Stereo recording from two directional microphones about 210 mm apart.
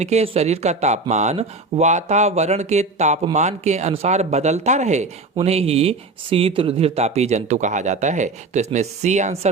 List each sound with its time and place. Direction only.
0.0 s speech: 30° right (ahead or behind)